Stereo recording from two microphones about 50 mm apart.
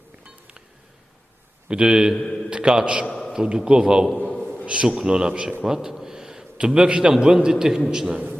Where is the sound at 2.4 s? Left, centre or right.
Centre.